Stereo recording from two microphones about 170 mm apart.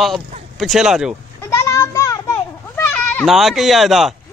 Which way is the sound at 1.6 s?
15° left (ahead or behind).